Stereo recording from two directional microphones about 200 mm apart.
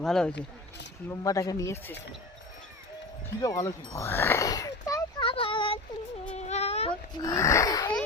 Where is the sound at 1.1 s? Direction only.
15° left (ahead or behind).